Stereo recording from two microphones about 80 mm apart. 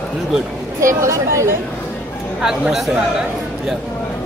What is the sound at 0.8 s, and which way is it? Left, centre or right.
Speech, right.